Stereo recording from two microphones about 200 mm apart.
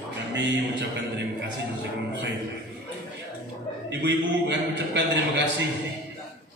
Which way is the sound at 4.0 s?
60° right (ahead or behind).